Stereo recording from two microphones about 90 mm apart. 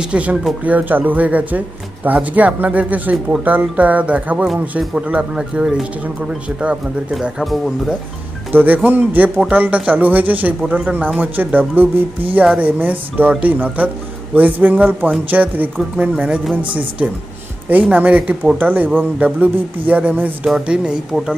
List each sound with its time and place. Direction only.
0.0 s speech: 15° right (ahead or behind)
8.5 s speech: 20° right (ahead or behind)
17.6 s speech: 20° right (ahead or behind)